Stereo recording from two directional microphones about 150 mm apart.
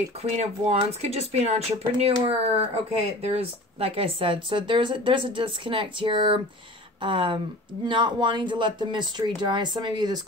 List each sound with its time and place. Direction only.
0.2 s speech: 45° right (ahead or behind); by 10.2 s 30° right (ahead or behind)